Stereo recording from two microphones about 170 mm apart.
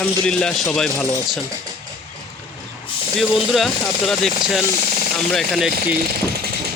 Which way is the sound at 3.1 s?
Centre (ahead or behind).